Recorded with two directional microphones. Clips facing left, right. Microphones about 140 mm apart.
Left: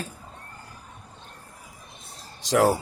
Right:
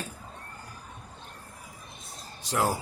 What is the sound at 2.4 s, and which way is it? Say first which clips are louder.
Speech: left 7 dB; 90° left.